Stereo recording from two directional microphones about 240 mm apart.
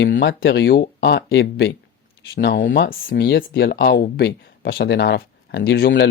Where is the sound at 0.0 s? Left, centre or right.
Left.